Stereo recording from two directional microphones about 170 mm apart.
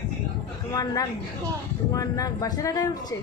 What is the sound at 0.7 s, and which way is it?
Speech, 20° left (ahead or behind).